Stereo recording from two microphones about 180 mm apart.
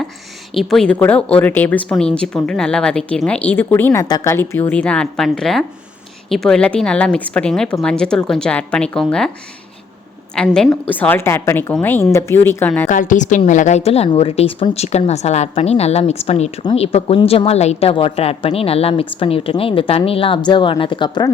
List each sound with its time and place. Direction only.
0.5 s a woman's voice: centre (ahead or behind)
10.3 s a woman's voice: 5° left (ahead or behind)
12.9 s a woman's voice: 45° left (ahead or behind); by 21.3 s 25° left (ahead or behind)